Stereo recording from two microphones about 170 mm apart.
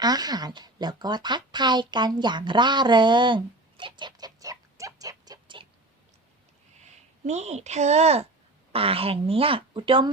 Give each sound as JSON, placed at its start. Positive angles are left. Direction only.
{"t": 0.0, "sound": "speech", "side_deg": -25}
{"t": 7.3, "sound": "speech", "side_deg": -40}